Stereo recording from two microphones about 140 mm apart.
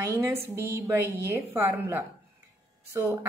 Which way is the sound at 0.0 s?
20° right (ahead or behind).